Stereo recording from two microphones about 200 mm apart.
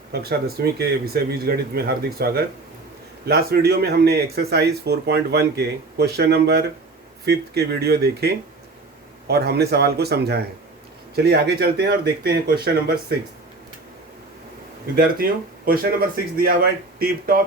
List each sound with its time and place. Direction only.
0.1 s speech: 50° right (ahead or behind)
14.9 s speech: 50° right (ahead or behind)